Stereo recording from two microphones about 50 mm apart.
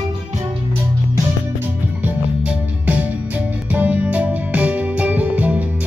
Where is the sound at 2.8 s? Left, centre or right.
Right.